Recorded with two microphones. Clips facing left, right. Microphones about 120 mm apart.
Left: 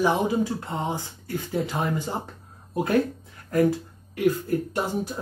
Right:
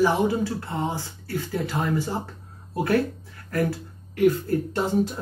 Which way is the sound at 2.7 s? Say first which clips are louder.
Even; 20° left (ahead or behind).